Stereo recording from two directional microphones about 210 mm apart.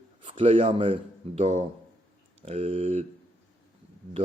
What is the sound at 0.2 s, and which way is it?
Speech, 25° right (ahead or behind).